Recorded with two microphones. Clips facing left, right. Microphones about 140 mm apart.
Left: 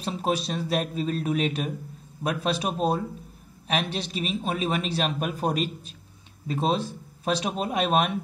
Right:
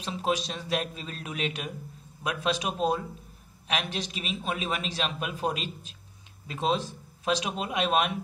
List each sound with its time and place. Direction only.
0.0 s a man's voice: 35° left (ahead or behind)